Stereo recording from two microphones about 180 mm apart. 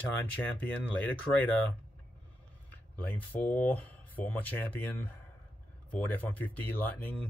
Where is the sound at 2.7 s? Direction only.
10° left (ahead or behind).